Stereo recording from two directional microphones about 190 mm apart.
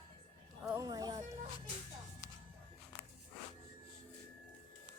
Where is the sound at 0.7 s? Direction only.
20° right (ahead or behind).